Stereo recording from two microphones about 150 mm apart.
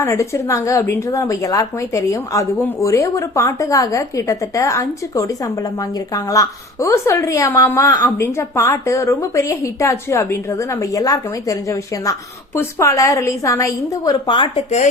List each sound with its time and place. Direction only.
0.0 s a woman's voice: 20° left (ahead or behind); by 14.8 s 45° left (ahead or behind)